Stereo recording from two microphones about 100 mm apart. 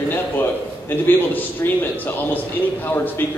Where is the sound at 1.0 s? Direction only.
20° left (ahead or behind).